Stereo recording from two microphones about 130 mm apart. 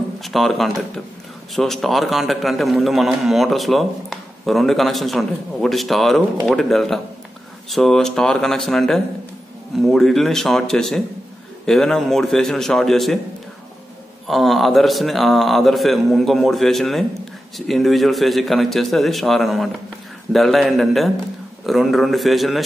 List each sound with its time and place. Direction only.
0.2 s a man's voice: centre (ahead or behind)
14.2 s a man's voice: centre (ahead or behind)